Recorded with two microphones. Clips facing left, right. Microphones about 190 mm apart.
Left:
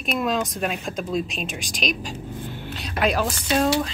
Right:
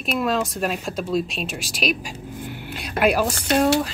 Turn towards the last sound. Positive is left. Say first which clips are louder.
# right 2 dB
turn(degrees=-5)  # may be behind; listen again after turning